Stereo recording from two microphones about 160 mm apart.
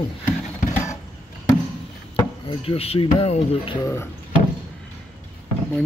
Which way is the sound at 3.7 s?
20° left (ahead or behind).